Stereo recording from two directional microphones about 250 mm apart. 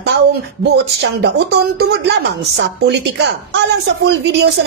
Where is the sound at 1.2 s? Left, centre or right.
Right.